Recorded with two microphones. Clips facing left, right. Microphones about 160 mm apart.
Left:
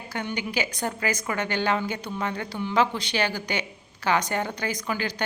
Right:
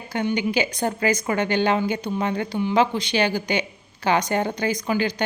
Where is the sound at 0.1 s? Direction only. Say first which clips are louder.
Right 7 dB; 20° right (ahead or behind).